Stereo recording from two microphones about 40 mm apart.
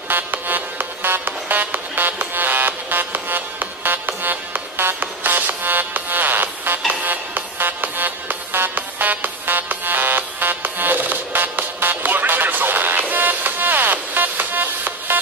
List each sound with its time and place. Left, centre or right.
0.1 s music: right